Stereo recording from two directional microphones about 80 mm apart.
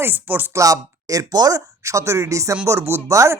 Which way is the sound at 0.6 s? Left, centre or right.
Right.